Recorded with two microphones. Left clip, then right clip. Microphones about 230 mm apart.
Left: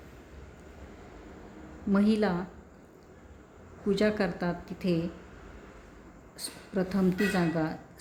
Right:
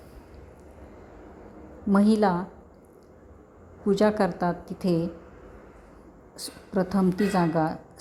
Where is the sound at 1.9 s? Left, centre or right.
Centre.